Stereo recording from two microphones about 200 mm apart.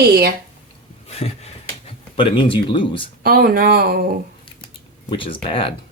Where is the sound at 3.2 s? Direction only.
50° right (ahead or behind).